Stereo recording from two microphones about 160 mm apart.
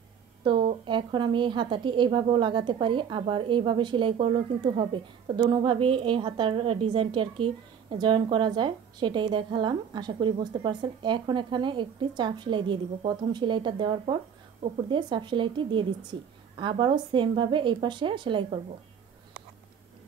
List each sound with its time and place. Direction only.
0.4 s a woman's voice: 30° right (ahead or behind)